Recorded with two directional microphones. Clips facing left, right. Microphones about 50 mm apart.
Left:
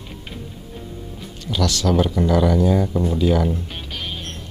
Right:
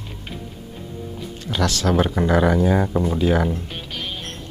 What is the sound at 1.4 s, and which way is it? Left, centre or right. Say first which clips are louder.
Speech: even; right.